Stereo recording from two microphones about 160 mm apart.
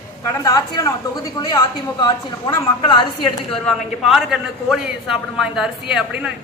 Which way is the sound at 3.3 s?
Centre (ahead or behind).